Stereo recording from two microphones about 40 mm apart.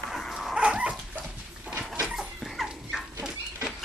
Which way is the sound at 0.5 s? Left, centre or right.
Right.